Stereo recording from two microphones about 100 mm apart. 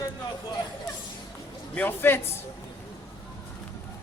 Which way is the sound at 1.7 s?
20° left (ahead or behind).